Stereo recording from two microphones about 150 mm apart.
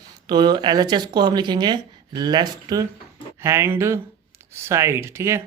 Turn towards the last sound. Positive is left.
turn(degrees=-20)  # may be behind; listen again after turning